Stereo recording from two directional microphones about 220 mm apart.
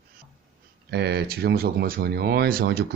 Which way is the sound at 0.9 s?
50° right (ahead or behind).